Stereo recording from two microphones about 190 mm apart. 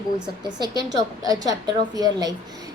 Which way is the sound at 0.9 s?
20° right (ahead or behind).